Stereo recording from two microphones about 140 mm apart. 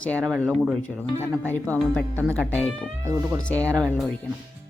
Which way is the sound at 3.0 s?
20° right (ahead or behind).